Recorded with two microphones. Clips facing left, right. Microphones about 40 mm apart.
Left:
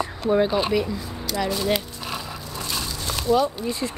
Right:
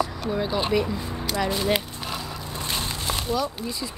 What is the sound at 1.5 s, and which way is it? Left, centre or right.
Speech, centre.